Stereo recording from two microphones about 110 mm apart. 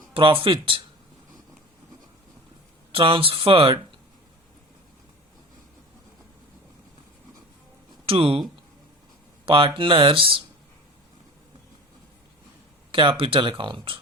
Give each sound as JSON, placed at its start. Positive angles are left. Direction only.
{"t": 0.1, "sound": "speech", "side_deg": -55}
{"t": 2.9, "sound": "speech", "side_deg": -55}
{"t": 8.0, "sound": "speech", "side_deg": -60}
{"t": 9.5, "sound": "speech", "side_deg": -50}
{"t": 12.9, "sound": "speech", "side_deg": -50}